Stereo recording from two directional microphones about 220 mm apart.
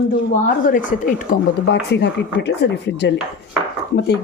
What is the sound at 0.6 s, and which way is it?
Speech, 40° left (ahead or behind).